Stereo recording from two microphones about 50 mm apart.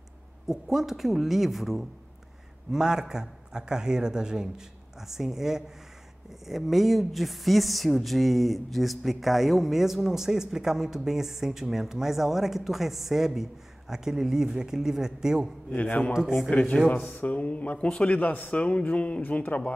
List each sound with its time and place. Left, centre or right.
0.5 s speech: centre
15.7 s speech: left
16.1 s speech: centre
16.9 s speech: left